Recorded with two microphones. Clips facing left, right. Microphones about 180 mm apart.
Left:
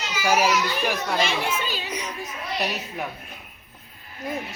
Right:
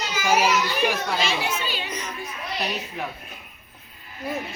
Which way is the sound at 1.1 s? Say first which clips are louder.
Left 1 dB; 55° left (ahead or behind).